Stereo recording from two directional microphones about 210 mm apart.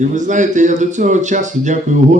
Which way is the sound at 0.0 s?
35° right (ahead or behind).